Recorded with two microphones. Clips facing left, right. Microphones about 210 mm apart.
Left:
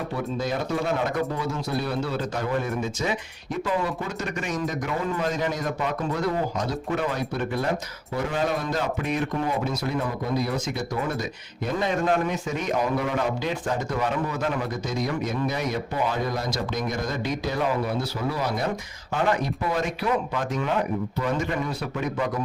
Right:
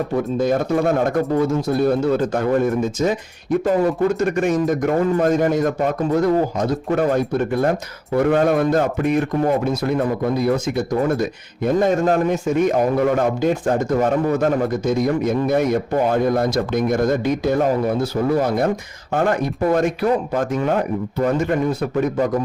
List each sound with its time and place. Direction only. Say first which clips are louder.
0.1 s speech: right 10 dB; 50° right (ahead or behind)
11.1 s speech: right 9 dB; 50° right (ahead or behind)